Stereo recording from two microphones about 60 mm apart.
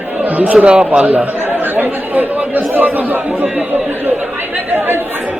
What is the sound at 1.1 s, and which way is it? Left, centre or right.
Chatter, right.